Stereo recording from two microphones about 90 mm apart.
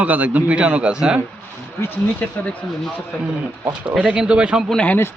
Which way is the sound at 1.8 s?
25° left (ahead or behind).